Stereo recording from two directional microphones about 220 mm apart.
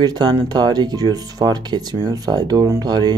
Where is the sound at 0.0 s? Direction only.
20° right (ahead or behind).